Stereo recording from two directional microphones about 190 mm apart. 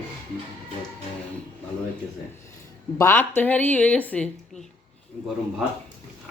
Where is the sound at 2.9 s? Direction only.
10° left (ahead or behind).